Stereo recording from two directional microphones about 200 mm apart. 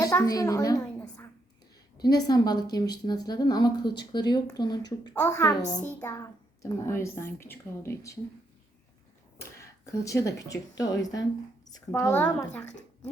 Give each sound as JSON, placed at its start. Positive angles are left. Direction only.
{"t": 0.0, "sound": "a woman's voice", "side_deg": 15}
{"t": 9.4, "sound": "speech", "side_deg": 15}